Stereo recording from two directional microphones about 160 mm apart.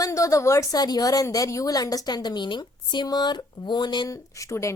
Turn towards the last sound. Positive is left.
turn(degrees=20)  # may be behind; listen again after turning